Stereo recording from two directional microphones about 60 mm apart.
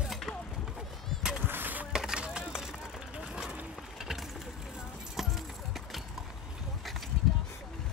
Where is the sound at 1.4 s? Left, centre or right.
Right.